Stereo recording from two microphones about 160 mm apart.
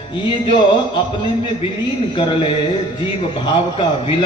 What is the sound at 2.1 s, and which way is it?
A man's voice, 30° left (ahead or behind).